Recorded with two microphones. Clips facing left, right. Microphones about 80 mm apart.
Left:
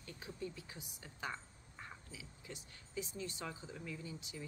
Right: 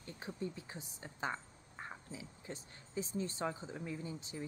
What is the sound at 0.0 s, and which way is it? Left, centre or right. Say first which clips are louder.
Speech: right 3 dB; right.